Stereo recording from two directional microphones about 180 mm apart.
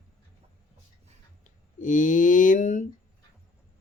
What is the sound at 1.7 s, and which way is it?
Speech, 45° left (ahead or behind).